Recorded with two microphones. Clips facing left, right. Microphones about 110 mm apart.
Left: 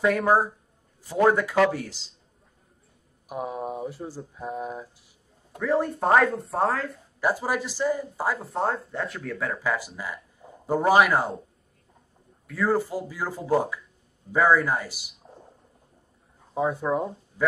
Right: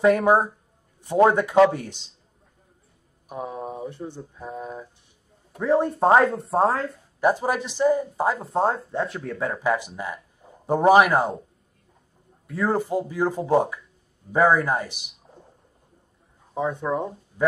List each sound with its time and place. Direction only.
0.0 s speech: 25° right (ahead or behind)
3.3 s speech: 5° left (ahead or behind)
5.6 s speech: 25° right (ahead or behind)
12.4 s speech: 25° right (ahead or behind)
16.5 s speech: centre (ahead or behind)